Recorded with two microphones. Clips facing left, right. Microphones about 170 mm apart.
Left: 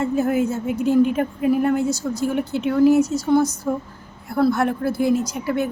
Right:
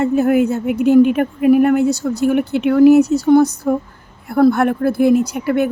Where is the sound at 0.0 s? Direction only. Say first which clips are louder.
Right 6 dB; 65° right (ahead or behind).